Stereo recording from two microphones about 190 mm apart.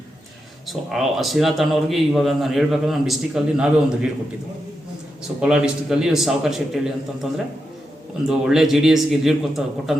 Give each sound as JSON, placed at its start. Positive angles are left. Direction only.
{"t": 0.7, "sound": "a man's voice", "side_deg": 0}
{"t": 5.4, "sound": "a man's voice", "side_deg": -5}
{"t": 8.3, "sound": "a man's voice", "side_deg": 0}